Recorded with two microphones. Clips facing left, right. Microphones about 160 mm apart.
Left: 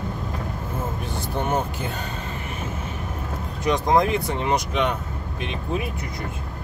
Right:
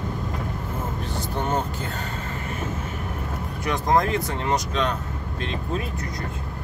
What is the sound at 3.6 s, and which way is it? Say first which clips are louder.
Speech: left 2 dB; 15° left (ahead or behind).